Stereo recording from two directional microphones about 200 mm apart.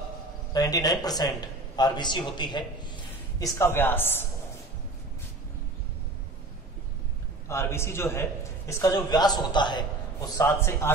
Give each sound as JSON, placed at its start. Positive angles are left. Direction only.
{"t": 0.5, "sound": "a man's voice", "side_deg": 20}
{"t": 7.4, "sound": "a man's voice", "side_deg": 10}